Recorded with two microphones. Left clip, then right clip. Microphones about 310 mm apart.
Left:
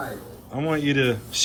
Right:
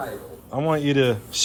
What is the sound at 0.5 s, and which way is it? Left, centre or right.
Speech, centre.